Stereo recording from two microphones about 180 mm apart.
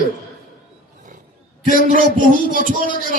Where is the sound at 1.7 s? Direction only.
50° right (ahead or behind).